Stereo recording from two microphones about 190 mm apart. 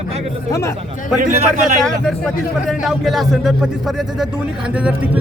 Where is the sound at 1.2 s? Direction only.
45° right (ahead or behind).